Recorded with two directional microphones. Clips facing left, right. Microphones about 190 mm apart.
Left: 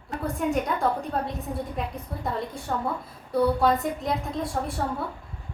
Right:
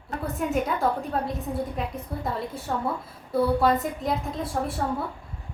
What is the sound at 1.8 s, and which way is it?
A woman's voice, centre (ahead or behind).